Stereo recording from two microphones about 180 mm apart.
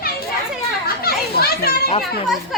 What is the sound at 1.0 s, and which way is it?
Children playing, 60° left (ahead or behind).